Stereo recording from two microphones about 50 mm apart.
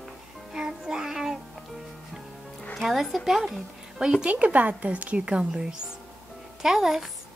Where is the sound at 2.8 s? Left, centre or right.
Centre.